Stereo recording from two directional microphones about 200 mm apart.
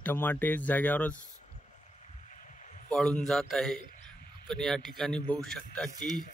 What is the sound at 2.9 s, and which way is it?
A man's voice, 5° left (ahead or behind).